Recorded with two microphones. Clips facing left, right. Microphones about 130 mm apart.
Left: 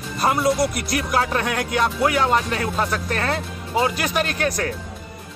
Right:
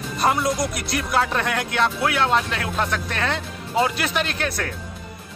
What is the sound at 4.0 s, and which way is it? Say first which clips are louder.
Speech: left 2 dB; 45° left (ahead or behind).